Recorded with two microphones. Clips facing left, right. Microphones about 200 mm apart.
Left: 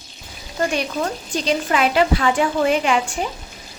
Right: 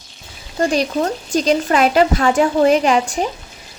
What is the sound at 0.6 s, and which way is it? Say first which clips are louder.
A woman's voice: right 5 dB; 35° right (ahead or behind).